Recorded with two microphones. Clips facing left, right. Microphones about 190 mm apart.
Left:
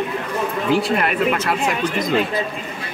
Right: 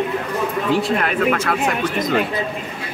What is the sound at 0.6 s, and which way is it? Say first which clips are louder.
Speech: left 1 dB; centre (ahead or behind).